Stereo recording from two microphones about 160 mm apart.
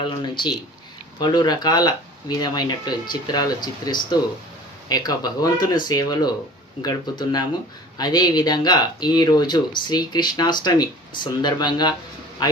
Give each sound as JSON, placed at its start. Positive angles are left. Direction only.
{"t": 0.1, "sound": "a man's voice", "side_deg": 30}